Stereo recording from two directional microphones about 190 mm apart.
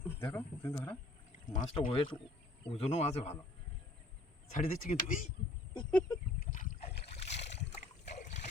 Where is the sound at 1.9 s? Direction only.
25° left (ahead or behind).